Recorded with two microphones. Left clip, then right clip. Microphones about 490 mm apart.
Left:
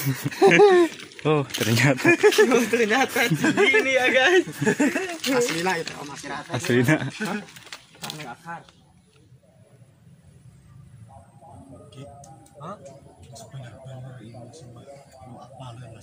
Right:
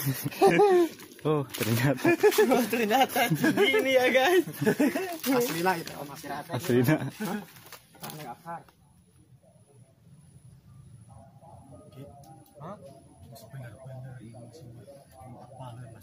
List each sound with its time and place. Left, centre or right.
0.4 s speech: right
2.5 s speech: right
3.3 s speech: right
3.8 s speech: right
4.6 s speech: right
5.6 s speech: right
6.2 s speech: right